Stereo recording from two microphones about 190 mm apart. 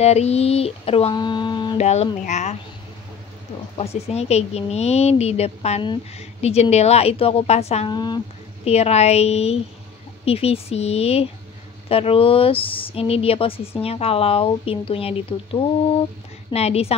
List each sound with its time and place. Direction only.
0.0 s a woman's voice: 35° left (ahead or behind)
1.8 s a woman's voice: 35° left (ahead or behind)
3.7 s a woman's voice: 35° left (ahead or behind)
7.9 s speech: 20° left (ahead or behind)
8.6 s a woman's voice: 35° left (ahead or behind)
16.4 s a woman's voice: 35° left (ahead or behind)